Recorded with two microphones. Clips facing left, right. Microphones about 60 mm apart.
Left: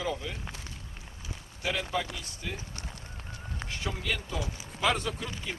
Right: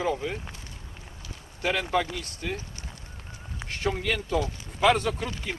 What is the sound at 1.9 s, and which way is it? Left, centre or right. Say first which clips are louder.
Speech: right 6 dB; right.